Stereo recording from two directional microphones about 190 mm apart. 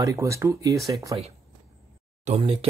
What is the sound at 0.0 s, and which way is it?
Speech, 15° right (ahead or behind).